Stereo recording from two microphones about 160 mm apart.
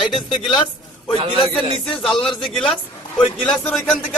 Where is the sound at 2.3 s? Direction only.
Centre (ahead or behind).